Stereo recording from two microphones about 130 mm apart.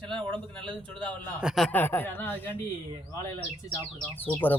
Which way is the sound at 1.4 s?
5° right (ahead or behind).